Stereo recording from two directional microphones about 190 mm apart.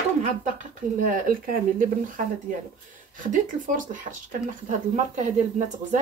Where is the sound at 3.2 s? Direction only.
45° right (ahead or behind).